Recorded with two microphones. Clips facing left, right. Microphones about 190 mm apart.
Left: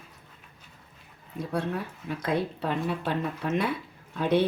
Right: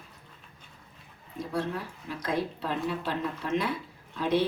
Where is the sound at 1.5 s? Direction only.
55° left (ahead or behind).